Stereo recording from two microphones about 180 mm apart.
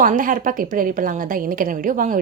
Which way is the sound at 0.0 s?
50° right (ahead or behind).